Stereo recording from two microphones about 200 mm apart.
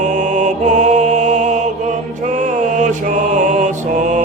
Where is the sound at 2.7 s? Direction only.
40° right (ahead or behind).